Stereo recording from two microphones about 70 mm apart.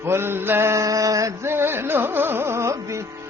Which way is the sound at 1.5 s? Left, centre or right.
Right.